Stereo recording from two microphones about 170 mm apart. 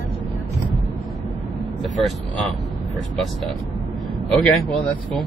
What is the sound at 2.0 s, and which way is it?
Speech, centre (ahead or behind).